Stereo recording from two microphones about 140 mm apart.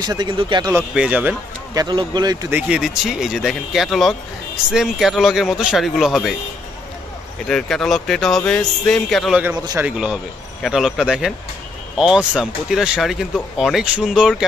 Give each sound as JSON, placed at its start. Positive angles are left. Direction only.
{"t": 0.0, "sound": "speech", "side_deg": -30}
{"t": 0.7, "sound": "speech", "side_deg": -10}
{"t": 1.7, "sound": "speech", "side_deg": -30}
{"t": 2.5, "sound": "speech", "side_deg": -5}
{"t": 7.4, "sound": "speech", "side_deg": 5}